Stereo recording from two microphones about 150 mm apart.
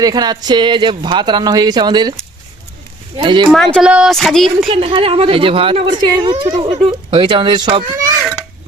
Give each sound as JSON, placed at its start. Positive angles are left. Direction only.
{"t": 0.0, "sound": "speech", "side_deg": -25}
{"t": 3.2, "sound": "speech", "side_deg": -30}
{"t": 3.5, "sound": "a woman's voice", "side_deg": 0}
{"t": 4.7, "sound": "speech", "side_deg": -35}